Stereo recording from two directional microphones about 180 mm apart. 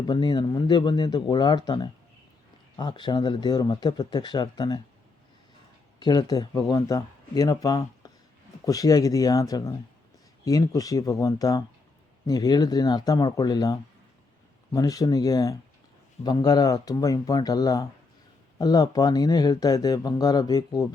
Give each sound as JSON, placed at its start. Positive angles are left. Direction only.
{"t": 0.1, "sound": "speech", "side_deg": 25}
{"t": 6.0, "sound": "speech", "side_deg": 25}
{"t": 8.0, "sound": "a sound", "side_deg": 20}
{"t": 8.6, "sound": "speech", "side_deg": 20}